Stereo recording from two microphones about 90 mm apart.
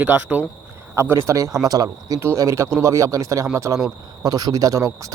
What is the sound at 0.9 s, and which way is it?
Speech, 30° right (ahead or behind).